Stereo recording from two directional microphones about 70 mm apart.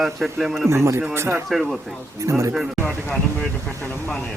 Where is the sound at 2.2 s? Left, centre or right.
Right.